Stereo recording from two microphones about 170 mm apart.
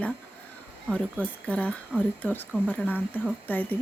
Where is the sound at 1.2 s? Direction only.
10° left (ahead or behind).